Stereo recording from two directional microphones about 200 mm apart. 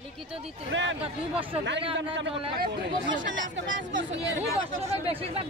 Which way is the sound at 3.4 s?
65° right (ahead or behind).